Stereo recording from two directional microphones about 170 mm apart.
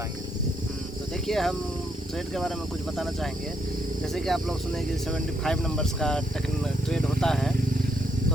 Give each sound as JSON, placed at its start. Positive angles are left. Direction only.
{"t": 1.3, "sound": "speech", "side_deg": 0}
{"t": 4.1, "sound": "speech", "side_deg": 0}